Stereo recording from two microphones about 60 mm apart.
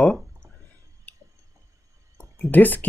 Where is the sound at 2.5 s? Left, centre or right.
Left.